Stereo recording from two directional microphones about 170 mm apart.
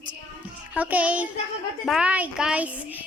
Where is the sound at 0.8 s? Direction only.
10° right (ahead or behind).